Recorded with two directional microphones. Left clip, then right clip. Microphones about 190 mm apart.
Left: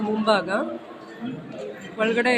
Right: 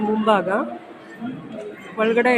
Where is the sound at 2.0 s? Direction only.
20° right (ahead or behind).